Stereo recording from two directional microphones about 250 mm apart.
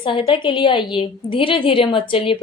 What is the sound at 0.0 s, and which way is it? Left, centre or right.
Speech, left.